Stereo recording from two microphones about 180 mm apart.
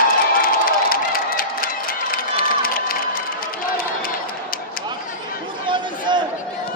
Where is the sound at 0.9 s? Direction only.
55° left (ahead or behind).